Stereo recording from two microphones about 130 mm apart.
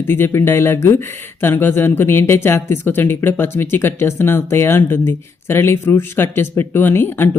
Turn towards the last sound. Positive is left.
turn(degrees=15)  # may be behind; listen again after turning